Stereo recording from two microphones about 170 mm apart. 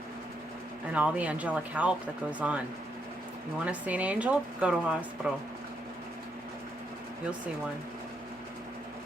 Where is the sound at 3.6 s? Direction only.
10° right (ahead or behind).